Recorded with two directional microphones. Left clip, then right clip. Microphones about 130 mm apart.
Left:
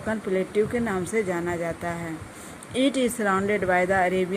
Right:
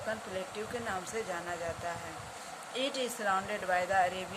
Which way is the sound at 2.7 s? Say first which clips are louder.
Left 11 dB; 65° left (ahead or behind).